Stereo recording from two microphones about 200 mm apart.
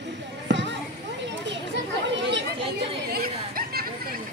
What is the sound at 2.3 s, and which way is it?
Chatter, 60° right (ahead or behind).